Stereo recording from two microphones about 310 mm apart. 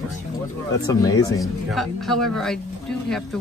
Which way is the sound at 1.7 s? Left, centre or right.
Centre.